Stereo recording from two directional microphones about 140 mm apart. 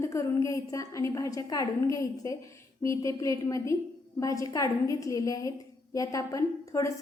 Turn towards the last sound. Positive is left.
turn(degrees=25)  # may be behind; listen again after turning